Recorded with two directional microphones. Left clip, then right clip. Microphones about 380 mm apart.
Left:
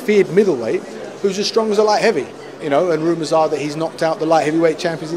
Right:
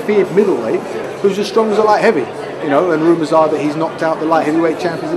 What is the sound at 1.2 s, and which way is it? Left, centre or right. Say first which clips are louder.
A man's voice: right 3 dB; left.